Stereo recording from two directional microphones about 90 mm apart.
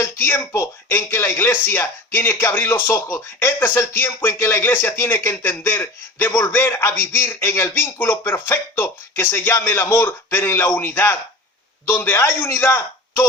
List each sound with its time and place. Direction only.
0.0 s speech: 30° left (ahead or behind)